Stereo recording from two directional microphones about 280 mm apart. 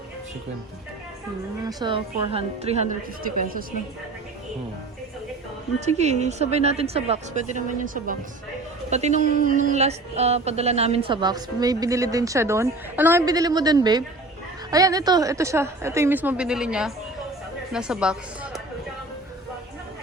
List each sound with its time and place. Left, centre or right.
1.6 s a woman's voice: centre
5.8 s a woman's voice: right; by 18.6 s centre